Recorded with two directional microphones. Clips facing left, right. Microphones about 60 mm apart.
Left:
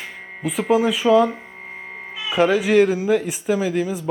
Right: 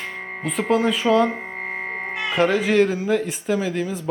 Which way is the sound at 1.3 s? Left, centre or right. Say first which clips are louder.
Right 5 dB; right.